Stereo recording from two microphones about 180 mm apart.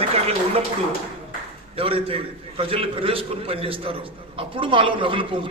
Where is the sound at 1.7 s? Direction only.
30° right (ahead or behind).